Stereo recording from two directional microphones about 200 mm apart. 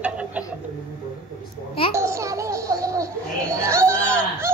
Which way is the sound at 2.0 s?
15° right (ahead or behind).